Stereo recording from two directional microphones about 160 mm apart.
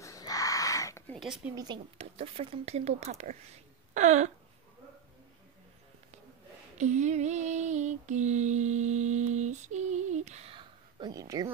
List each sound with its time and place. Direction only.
0.0 s a sound: 20° left (ahead or behind)
1.1 s speech: centre (ahead or behind)
1.5 s speech: 25° right (ahead or behind)
2.0 s speech: 40° right (ahead or behind)
3.9 s a sound: 50° right (ahead or behind)
6.8 s female singing: 50° right (ahead or behind); by 11.5 s 20° right (ahead or behind)